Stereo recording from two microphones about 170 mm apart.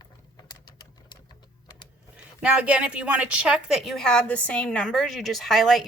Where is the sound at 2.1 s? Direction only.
5° right (ahead or behind).